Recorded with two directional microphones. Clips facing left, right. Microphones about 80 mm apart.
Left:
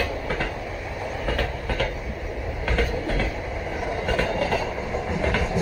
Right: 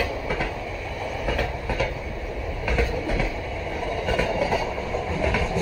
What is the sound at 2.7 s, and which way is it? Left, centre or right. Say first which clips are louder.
Train: even; left.